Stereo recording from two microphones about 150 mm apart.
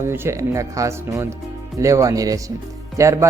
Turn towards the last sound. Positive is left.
turn(degrees=-20)  # may be behind; listen again after turning